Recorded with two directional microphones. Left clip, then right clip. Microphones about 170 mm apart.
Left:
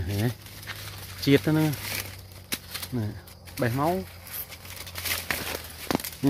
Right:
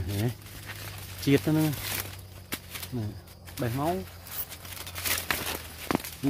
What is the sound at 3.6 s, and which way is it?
Speech, 45° left (ahead or behind).